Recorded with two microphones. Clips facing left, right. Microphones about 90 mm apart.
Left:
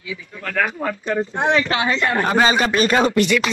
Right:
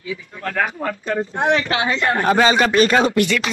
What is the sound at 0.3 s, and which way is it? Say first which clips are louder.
Speech: even; 15° right (ahead or behind).